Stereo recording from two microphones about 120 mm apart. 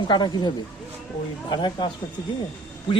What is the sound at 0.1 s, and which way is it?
Speech, 40° left (ahead or behind).